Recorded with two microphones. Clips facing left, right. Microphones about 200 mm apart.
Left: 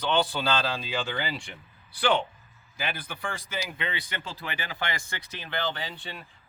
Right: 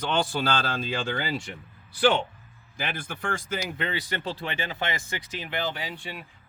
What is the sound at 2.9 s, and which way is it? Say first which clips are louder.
Speech: right 4 dB; 45° right (ahead or behind).